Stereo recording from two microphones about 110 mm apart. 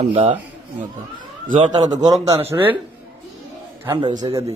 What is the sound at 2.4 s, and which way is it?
Speech, 20° right (ahead or behind).